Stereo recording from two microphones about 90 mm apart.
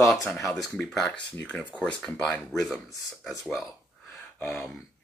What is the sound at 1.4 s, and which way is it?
Speech, 15° left (ahead or behind).